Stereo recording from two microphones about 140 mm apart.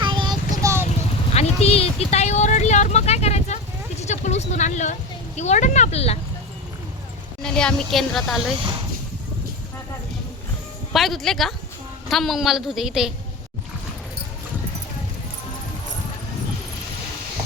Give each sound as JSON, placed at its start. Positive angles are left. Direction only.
{"t": 0.0, "sound": "child singing", "side_deg": -35}
{"t": 1.3, "sound": "vehicle", "side_deg": 50}
{"t": 4.0, "sound": "speech", "side_deg": 55}
{"t": 7.4, "sound": "a woman's voice", "side_deg": 5}
{"t": 10.9, "sound": "a woman's voice", "side_deg": 0}